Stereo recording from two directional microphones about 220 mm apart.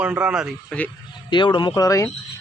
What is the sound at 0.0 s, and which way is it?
Speech, 5° right (ahead or behind).